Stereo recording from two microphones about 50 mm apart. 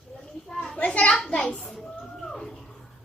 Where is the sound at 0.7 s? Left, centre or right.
Left.